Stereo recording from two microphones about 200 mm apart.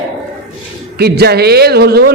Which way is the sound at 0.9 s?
55° right (ahead or behind).